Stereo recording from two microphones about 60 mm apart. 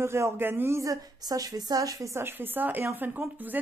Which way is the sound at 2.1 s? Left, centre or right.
Right.